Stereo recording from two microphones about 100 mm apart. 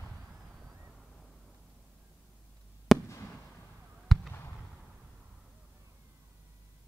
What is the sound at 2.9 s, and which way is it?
Fireworks, 25° left (ahead or behind).